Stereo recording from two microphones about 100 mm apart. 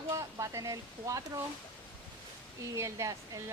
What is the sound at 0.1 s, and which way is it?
Speech, 35° right (ahead or behind).